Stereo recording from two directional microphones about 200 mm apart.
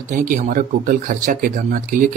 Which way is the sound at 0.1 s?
40° right (ahead or behind).